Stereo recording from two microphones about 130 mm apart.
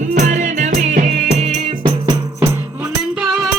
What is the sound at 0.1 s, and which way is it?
Music, 85° right.